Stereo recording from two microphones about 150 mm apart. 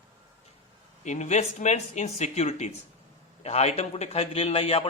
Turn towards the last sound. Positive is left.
turn(degrees=40)  # may be behind; listen again after turning